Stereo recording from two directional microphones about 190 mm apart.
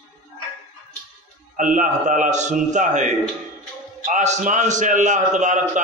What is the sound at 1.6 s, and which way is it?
A man's voice, 45° right (ahead or behind).